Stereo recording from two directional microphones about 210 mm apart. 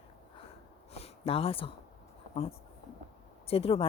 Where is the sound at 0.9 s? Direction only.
30° left (ahead or behind).